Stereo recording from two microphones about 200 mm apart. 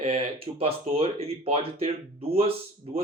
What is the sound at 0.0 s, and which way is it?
Speech, 30° right (ahead or behind).